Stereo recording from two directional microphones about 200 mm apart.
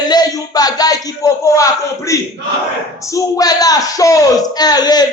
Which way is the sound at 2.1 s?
15° left (ahead or behind).